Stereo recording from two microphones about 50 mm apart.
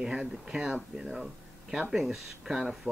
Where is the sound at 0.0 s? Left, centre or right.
Centre.